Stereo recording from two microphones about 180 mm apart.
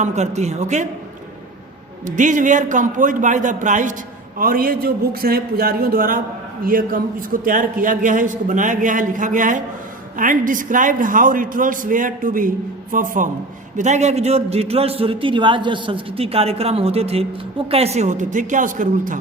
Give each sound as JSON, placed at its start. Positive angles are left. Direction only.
{"t": 0.0, "sound": "a man's voice", "side_deg": -40}
{"t": 2.0, "sound": "a man's voice", "side_deg": -45}